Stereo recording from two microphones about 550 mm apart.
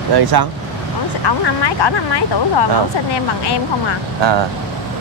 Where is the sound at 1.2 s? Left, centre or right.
Left.